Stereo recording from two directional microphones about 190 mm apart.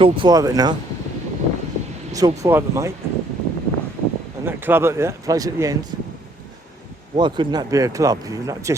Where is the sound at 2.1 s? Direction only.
15° right (ahead or behind).